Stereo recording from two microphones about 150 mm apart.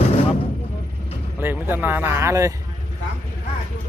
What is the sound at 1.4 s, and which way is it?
Speech, 15° right (ahead or behind).